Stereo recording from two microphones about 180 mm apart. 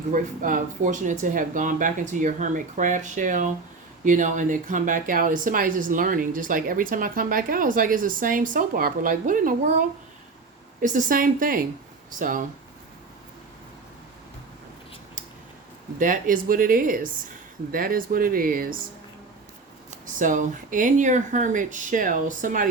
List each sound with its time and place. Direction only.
0.1 s speech: 45° right (ahead or behind)
16.0 s speech: 50° right (ahead or behind)
20.1 s speech: 45° right (ahead or behind)